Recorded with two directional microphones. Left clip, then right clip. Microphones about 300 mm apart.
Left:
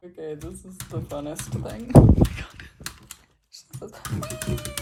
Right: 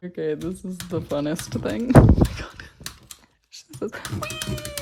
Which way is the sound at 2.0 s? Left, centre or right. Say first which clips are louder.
Even; left.